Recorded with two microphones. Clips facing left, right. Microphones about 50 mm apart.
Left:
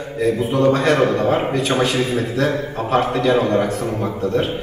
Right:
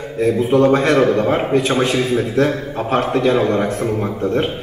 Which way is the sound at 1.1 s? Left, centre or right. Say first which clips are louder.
Right 2 dB; centre.